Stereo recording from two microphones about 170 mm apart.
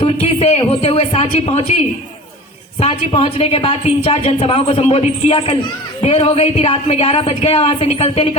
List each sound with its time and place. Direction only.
0.0 s a woman's voice: 35° left (ahead or behind)
2.8 s a woman's voice: 35° left (ahead or behind)